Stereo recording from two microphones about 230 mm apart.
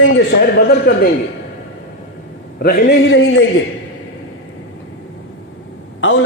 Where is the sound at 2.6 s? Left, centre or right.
Left.